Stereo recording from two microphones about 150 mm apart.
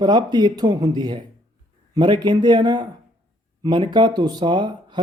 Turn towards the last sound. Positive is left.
turn(degrees=-30)  # may be behind; listen again after turning